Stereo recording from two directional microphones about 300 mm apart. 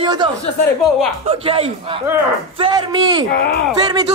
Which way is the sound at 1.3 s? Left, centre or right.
Centre.